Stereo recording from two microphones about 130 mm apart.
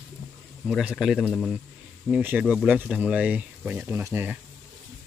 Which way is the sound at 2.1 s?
10° right (ahead or behind).